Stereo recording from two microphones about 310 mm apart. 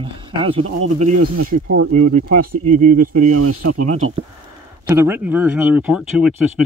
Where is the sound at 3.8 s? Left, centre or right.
Right.